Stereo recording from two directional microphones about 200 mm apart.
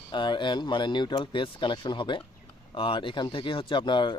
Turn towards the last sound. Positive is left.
turn(degrees=20)  # may be behind; listen again after turning